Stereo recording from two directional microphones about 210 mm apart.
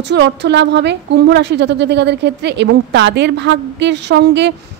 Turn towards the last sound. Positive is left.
turn(degrees=-55)  # may be behind; listen again after turning